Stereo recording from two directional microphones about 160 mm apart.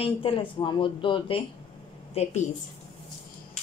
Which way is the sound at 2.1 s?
40° left (ahead or behind).